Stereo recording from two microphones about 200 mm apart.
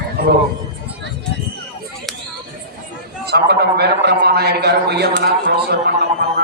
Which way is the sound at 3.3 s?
55° right (ahead or behind).